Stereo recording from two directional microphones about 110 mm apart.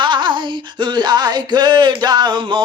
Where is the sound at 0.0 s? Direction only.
45° right (ahead or behind).